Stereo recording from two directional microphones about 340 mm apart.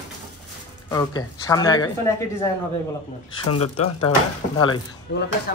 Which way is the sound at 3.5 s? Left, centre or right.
Left.